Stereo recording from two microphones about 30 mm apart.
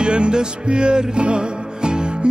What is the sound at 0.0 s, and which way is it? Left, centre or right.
Music, right.